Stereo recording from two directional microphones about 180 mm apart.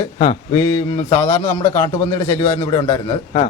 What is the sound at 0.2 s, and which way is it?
A man's voice, 25° left (ahead or behind).